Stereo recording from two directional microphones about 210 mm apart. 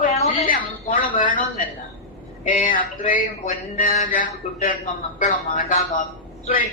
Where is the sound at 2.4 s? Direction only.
40° left (ahead or behind).